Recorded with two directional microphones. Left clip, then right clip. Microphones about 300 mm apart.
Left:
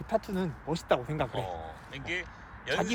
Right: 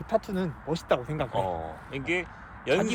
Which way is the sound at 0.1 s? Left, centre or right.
Centre.